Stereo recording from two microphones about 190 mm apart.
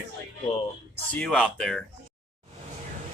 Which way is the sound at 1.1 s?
5° left (ahead or behind).